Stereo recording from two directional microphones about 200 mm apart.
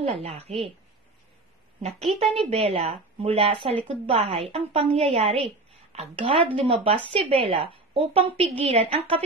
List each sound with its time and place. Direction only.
0.1 s a woman's voice: 30° right (ahead or behind)
1.8 s a woman's voice: 35° right (ahead or behind)